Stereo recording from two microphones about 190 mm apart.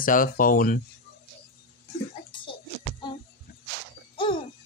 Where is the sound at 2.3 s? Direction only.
25° left (ahead or behind).